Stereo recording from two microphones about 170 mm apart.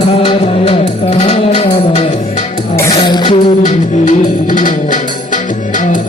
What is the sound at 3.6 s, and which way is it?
Music, 45° left (ahead or behind).